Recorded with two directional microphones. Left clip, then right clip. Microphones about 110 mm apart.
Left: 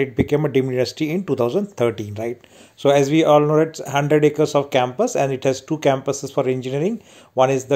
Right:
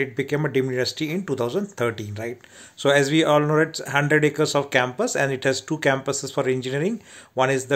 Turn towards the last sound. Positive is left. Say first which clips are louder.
# left 4 dB
turn(degrees=25)  # may be behind; listen again after turning